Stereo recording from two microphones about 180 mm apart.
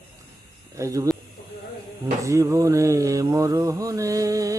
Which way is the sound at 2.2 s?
15° right (ahead or behind).